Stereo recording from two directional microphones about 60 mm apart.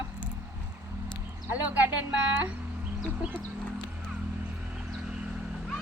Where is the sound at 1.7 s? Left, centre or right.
Right.